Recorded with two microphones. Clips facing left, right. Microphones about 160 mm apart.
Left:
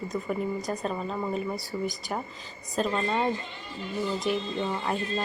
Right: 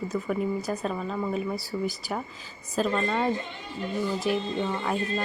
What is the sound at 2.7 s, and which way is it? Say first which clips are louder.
Speech: right 1 dB; centre (ahead or behind).